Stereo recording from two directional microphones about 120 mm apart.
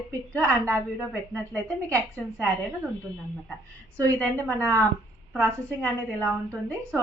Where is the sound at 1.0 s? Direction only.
15° left (ahead or behind).